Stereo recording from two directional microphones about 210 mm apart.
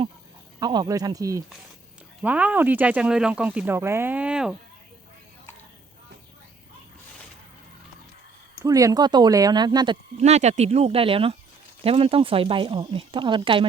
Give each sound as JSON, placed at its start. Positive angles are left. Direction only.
{"t": 0.6, "sound": "speech", "side_deg": -20}
{"t": 8.6, "sound": "speech", "side_deg": -15}